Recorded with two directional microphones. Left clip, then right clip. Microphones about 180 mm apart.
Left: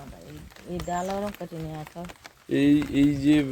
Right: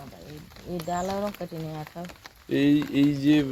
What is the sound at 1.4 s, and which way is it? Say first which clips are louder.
Speech: right 1 dB; 20° right (ahead or behind).